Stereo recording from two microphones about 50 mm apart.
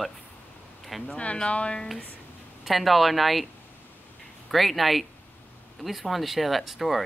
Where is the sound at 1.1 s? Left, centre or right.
Left.